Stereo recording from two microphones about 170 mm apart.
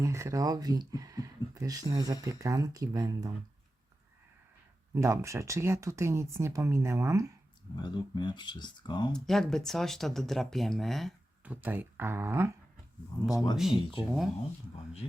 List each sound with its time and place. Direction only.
0.0 s speech: 15° right (ahead or behind)
4.9 s speech: 15° right (ahead or behind)
7.8 s speech: 25° left (ahead or behind)
9.1 s speech: 5° left (ahead or behind)
11.6 s speech: 10° right (ahead or behind)
13.2 s speech: 20° left (ahead or behind)